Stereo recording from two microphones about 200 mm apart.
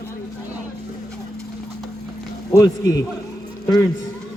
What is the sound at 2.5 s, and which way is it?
Speech, 15° left (ahead or behind).